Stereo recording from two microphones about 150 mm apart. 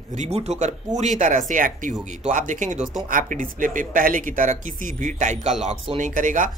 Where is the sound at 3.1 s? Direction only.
60° right (ahead or behind).